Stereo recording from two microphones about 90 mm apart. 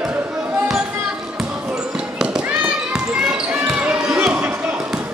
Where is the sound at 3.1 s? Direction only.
10° right (ahead or behind).